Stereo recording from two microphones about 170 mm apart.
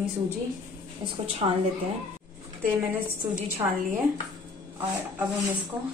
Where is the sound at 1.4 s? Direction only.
40° right (ahead or behind).